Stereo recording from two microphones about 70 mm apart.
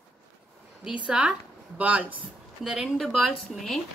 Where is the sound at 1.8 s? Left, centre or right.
Right.